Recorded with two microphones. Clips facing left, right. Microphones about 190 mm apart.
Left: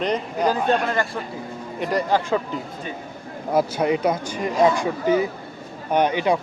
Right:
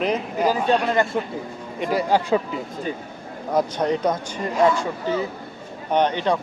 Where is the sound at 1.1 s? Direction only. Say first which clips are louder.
Right 5 dB; 15° right (ahead or behind).